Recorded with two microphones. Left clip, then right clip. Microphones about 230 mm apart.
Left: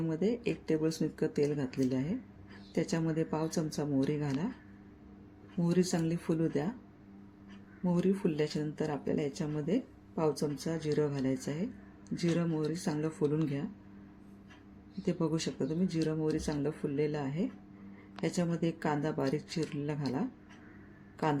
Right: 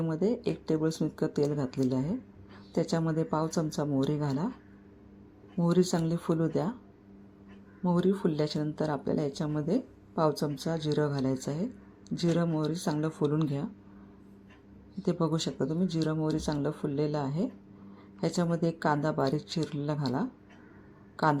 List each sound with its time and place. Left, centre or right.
0.1 s speech: centre
5.5 s speech: centre
8.2 s speech: centre
15.0 s speech: centre